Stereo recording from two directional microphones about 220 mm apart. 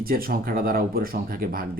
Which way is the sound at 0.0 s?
40° right (ahead or behind).